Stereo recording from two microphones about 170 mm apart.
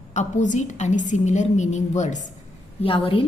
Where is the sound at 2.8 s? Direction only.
30° left (ahead or behind).